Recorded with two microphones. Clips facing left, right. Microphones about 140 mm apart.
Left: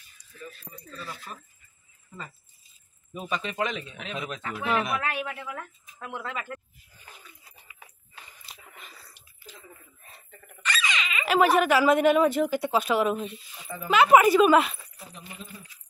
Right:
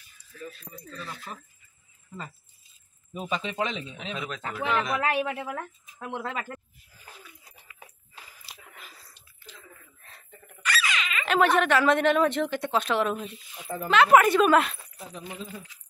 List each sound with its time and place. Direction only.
0.4 s speech: centre (ahead or behind)
3.6 s speech: 30° right (ahead or behind)
4.1 s speech: 5° left (ahead or behind)
5.0 s speech: 30° right (ahead or behind)
6.9 s a sound: 5° right (ahead or behind)
9.8 s a sound: 15° left (ahead or behind)
10.6 s speech: 5° right (ahead or behind)